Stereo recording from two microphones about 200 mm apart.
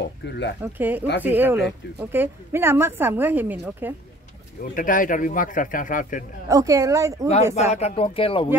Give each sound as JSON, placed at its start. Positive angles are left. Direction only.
{"t": 0.2, "sound": "speech", "side_deg": 60}
{"t": 0.6, "sound": "speech", "side_deg": -10}
{"t": 4.7, "sound": "speech", "side_deg": 40}
{"t": 6.5, "sound": "speech", "side_deg": -15}
{"t": 7.5, "sound": "speech", "side_deg": 35}